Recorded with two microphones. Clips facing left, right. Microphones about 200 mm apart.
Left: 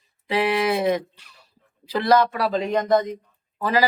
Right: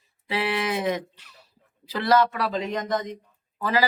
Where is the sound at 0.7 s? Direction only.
35° left (ahead or behind).